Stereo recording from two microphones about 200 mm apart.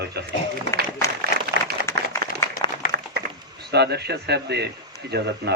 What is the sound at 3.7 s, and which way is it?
A man's voice, 55° right (ahead or behind).